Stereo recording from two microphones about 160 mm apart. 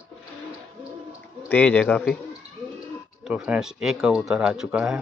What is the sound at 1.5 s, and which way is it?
Speech, 10° left (ahead or behind).